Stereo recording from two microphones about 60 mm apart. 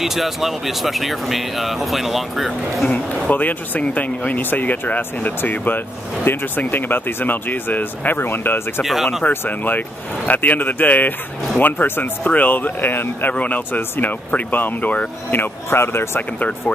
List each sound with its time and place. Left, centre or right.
0.0 s speech: centre
3.3 s speech: left
8.8 s speech: centre
9.5 s speech: left
16.2 s speech: left